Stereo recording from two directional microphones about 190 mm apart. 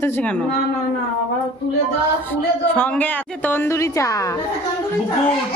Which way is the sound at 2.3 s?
5° left (ahead or behind).